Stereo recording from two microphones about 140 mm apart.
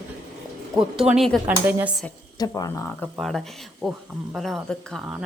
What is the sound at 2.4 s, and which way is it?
Speech, 25° left (ahead or behind).